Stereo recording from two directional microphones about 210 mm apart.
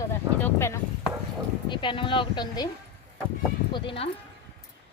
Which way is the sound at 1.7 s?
25° left (ahead or behind).